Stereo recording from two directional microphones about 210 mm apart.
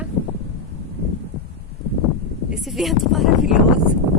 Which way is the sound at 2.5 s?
Centre (ahead or behind).